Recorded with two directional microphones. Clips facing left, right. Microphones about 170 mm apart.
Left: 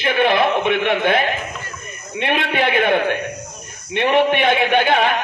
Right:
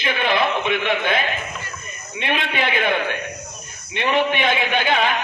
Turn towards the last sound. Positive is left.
turn(degrees=55)  # may be behind; listen again after turning